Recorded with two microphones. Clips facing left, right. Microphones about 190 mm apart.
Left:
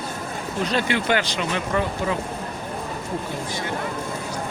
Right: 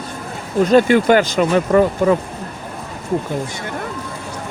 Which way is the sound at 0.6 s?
45° right (ahead or behind).